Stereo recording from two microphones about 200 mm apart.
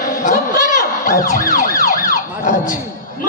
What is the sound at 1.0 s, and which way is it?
Ambulance, 45° left (ahead or behind).